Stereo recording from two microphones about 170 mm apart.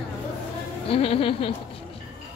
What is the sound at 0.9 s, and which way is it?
Speech, 35° left (ahead or behind).